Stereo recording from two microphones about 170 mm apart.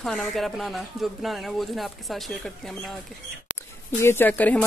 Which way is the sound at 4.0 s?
15° left (ahead or behind).